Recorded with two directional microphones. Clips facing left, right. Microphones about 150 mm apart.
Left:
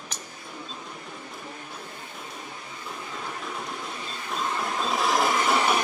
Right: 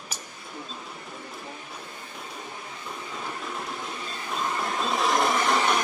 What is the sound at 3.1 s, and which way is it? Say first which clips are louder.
Train: right 1 dB; centre (ahead or behind).